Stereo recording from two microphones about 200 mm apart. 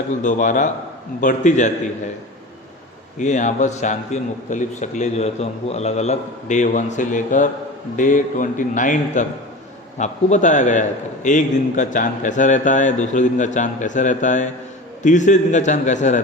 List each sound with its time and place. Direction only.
0.2 s a man's voice: 40° left (ahead or behind)
3.2 s a man's voice: 35° left (ahead or behind)